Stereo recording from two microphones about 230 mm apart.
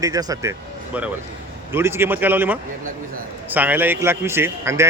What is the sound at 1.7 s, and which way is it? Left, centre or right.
Speech, centre.